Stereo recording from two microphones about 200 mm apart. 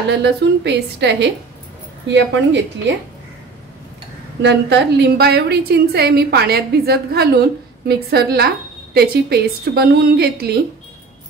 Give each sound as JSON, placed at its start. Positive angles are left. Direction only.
{"t": 0.1, "sound": "a woman's voice", "side_deg": -60}
{"t": 4.4, "sound": "a woman's voice", "side_deg": -55}